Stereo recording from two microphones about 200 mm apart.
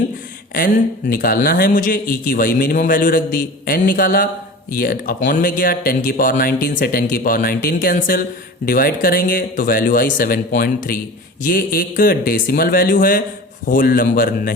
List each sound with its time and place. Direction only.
0.5 s a man's voice: 45° left (ahead or behind)